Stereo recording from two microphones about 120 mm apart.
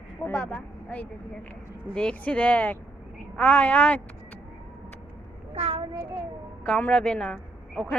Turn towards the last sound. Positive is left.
turn(degrees=5)  # may be behind; listen again after turning